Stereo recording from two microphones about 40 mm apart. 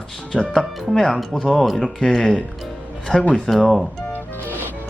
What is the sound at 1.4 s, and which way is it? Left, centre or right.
Speech, left.